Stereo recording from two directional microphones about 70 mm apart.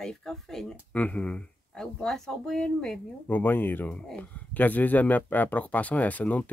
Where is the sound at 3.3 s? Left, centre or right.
Left.